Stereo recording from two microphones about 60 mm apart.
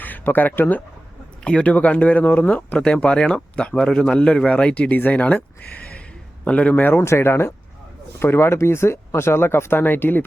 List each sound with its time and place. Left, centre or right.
0.0 s speech: left
1.5 s speech: left
2.7 s a man's voice: centre
7.0 s speech: left